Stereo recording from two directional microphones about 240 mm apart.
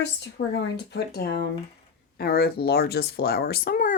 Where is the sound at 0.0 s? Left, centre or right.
Left.